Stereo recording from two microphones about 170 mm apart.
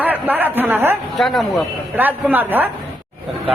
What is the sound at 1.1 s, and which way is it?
Speech, centre (ahead or behind).